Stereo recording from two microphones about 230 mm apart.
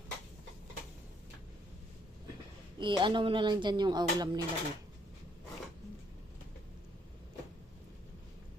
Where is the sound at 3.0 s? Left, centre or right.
Right.